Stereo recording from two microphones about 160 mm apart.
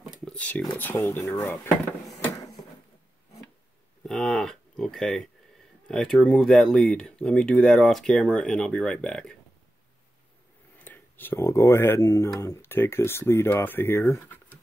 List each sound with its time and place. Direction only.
0.0 s a sound: 5° left (ahead or behind)
0.7 s speech: 15° left (ahead or behind)
4.0 s speech: centre (ahead or behind)
10.8 s speech: 10° left (ahead or behind)